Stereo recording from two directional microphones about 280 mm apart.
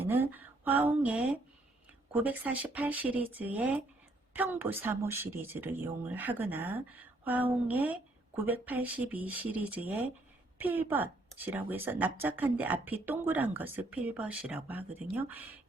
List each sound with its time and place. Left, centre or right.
0.0 s speech: centre